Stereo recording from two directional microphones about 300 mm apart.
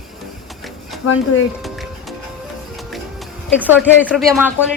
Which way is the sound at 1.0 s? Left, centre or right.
Left.